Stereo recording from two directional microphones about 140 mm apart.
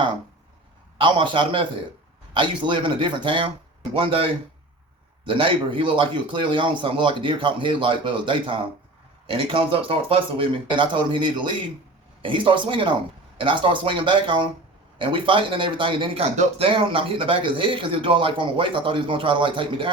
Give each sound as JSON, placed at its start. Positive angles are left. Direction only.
{"t": 0.9, "sound": "a man's voice", "side_deg": -35}